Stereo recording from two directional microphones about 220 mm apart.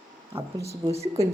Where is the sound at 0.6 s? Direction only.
30° right (ahead or behind).